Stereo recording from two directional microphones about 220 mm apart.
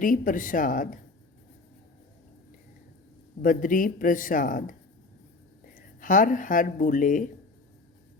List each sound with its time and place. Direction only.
0.0 s speech: 40° left (ahead or behind)
3.4 s speech: 40° left (ahead or behind)
5.7 s speech: 35° left (ahead or behind)